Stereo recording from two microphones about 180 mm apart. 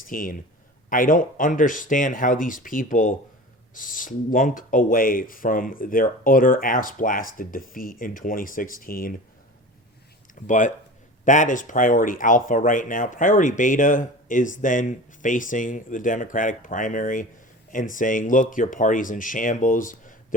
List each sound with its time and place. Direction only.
0.1 s speech: 50° left (ahead or behind)
10.4 s speech: 45° left (ahead or behind)